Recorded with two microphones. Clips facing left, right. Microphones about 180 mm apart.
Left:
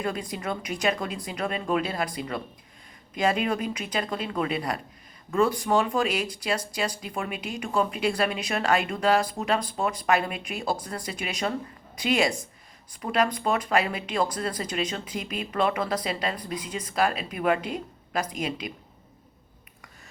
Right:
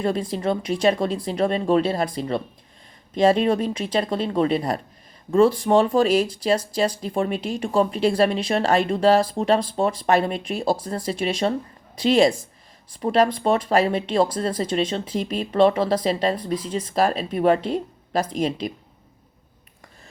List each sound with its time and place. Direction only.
0.0 s speech: 30° right (ahead or behind)
3.2 s speech: 30° right (ahead or behind)